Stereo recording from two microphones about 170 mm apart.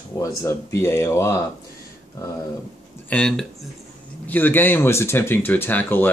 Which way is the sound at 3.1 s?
5° left (ahead or behind).